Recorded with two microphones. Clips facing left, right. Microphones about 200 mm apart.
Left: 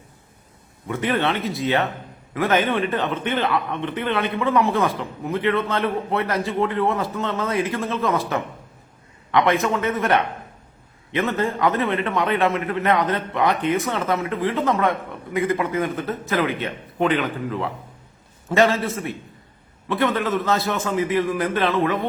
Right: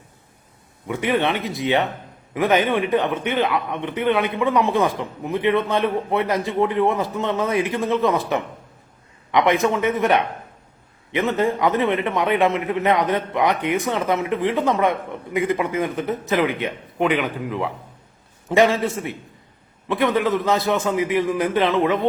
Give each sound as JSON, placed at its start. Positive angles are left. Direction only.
{"t": 0.9, "sound": "a man's voice", "side_deg": -15}
{"t": 19.9, "sound": "a man's voice", "side_deg": -15}